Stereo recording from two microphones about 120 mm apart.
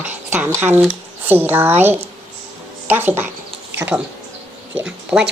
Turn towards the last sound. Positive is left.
turn(degrees=-10)  # may be behind; listen again after turning